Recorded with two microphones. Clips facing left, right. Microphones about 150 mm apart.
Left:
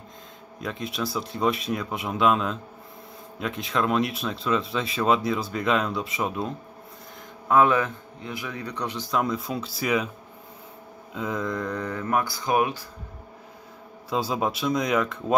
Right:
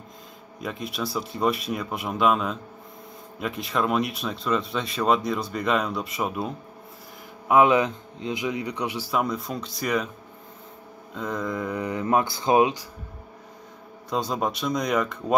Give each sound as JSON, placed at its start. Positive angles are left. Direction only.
{"t": 0.6, "sound": "speech", "side_deg": 0}
{"t": 7.4, "sound": "a man's voice", "side_deg": -15}
{"t": 11.1, "sound": "a man's voice", "side_deg": 0}
{"t": 14.1, "sound": "speech", "side_deg": 0}